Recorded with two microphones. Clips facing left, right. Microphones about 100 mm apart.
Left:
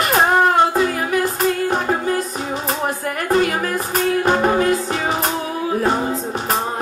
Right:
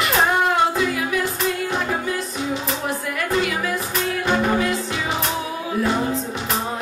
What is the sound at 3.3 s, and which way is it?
Music, 45° left (ahead or behind).